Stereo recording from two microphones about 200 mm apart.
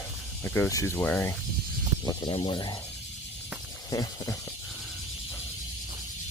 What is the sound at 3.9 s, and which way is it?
Speech, 20° left (ahead or behind).